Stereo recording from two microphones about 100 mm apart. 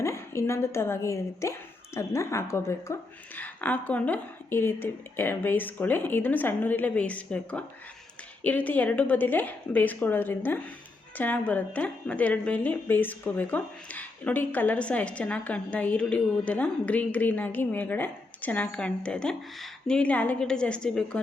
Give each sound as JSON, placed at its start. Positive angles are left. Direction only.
{"t": 0.0, "sound": "a woman's voice", "side_deg": 30}
{"t": 3.3, "sound": "speech", "side_deg": 15}